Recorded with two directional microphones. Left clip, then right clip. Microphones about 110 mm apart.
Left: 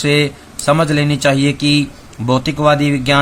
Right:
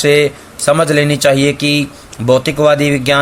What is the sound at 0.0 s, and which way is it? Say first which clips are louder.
Speech: right 5 dB; 30° right (ahead or behind).